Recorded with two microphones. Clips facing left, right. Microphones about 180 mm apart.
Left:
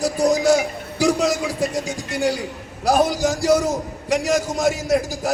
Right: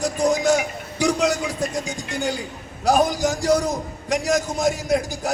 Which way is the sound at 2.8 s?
10° left (ahead or behind).